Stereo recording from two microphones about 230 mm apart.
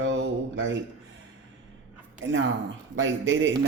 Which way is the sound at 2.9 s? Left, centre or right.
Right.